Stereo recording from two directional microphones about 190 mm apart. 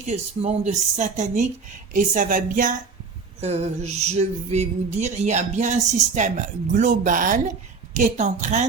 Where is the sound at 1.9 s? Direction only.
45° right (ahead or behind).